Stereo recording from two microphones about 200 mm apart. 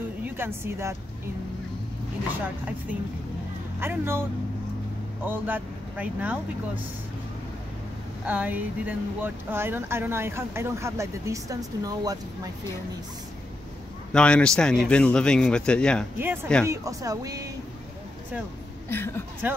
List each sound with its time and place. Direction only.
0.2 s speech: 10° right (ahead or behind)
2.4 s speech: 10° right (ahead or behind)
8.3 s speech: 10° right (ahead or behind)
14.1 s speech: 5° left (ahead or behind)
16.6 s speech: 15° right (ahead or behind)
18.9 s a woman's voice: 10° left (ahead or behind)